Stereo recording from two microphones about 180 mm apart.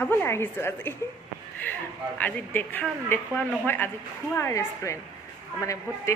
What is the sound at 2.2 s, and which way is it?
A woman's voice, 10° left (ahead or behind).